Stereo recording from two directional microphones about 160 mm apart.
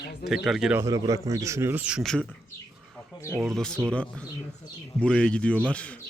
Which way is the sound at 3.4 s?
5° left (ahead or behind).